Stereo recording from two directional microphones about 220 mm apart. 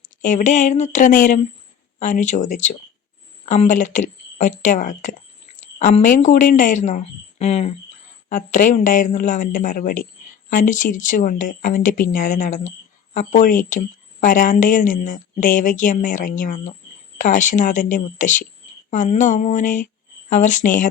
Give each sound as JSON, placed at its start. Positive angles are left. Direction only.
{"t": 0.0, "sound": "speech", "side_deg": 35}